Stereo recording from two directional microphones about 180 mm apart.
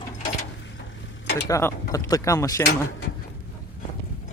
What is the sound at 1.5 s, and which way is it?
Speech, 15° left (ahead or behind).